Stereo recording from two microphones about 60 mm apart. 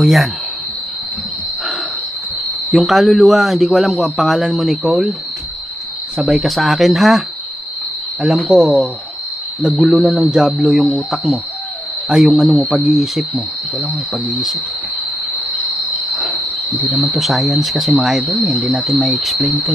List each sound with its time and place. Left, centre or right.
0.0 s a man's voice: centre
2.7 s a man's voice: centre
6.1 s a man's voice: centre
8.5 s a man's voice: centre
17.0 s a man's voice: centre
18.7 s speech: centre
19.2 s a man's voice: centre